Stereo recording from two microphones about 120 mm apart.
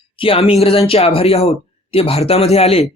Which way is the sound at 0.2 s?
50° left (ahead or behind).